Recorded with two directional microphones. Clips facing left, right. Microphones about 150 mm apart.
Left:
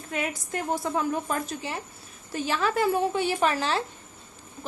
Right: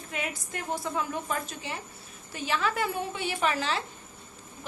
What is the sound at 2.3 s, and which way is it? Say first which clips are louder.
A woman's voice: left 3 dB; 40° left (ahead or behind).